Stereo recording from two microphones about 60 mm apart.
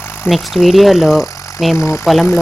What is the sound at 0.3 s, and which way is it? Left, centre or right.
Speech, centre.